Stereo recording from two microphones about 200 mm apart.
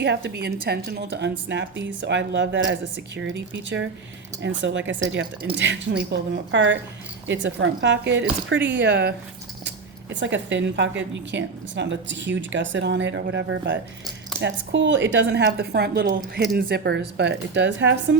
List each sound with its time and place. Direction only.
0.0 s speech: 60° right (ahead or behind)